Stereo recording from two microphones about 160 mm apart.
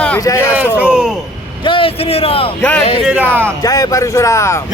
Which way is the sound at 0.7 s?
5° right (ahead or behind).